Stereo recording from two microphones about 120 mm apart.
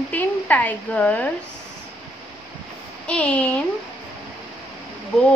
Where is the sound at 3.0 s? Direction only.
10° left (ahead or behind).